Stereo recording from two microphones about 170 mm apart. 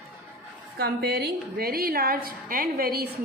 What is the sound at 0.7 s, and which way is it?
A woman's voice, 65° right (ahead or behind).